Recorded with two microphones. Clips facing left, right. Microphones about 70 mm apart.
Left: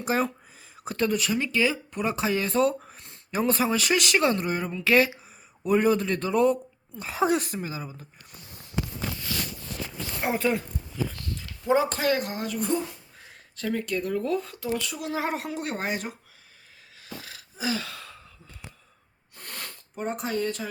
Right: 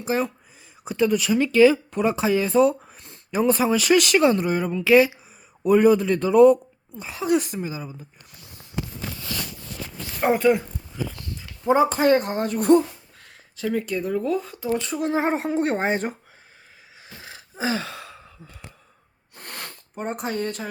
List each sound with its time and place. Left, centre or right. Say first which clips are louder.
0.9 s a woman's voice: right 5 dB; centre
1.4 s speech: right 10 dB; right
3.9 s speech: right 7 dB; left
4.2 s a woman's voice: right 5 dB; centre
10.5 s a sound: right 7 dB; centre
11.9 s speech: right 7 dB; right
13.6 s speech: right 3 dB; centre; by 16.1 s right
17.0 s a sound: left 1 dB; right
19.4 s sniff: right 3 dB; right